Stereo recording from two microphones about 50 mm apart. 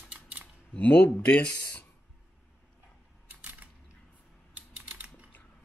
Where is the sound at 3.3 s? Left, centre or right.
Right.